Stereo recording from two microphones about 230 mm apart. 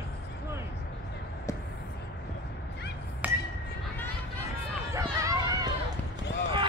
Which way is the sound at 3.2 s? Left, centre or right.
Centre.